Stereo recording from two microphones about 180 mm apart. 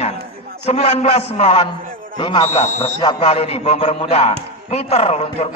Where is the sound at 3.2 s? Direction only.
35° left (ahead or behind).